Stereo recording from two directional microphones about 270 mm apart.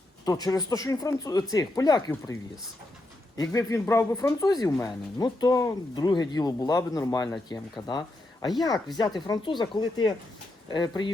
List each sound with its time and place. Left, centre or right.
0.3 s speech: centre
3.3 s speech: centre